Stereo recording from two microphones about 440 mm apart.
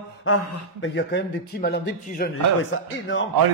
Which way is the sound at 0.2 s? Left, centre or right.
Left.